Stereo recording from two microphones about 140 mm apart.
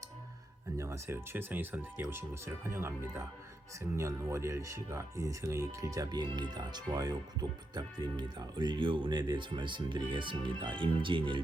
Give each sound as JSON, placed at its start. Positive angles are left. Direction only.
{"t": 0.8, "sound": "speech", "side_deg": -20}